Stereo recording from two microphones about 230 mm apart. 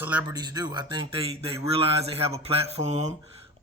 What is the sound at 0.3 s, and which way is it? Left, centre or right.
Speech, centre.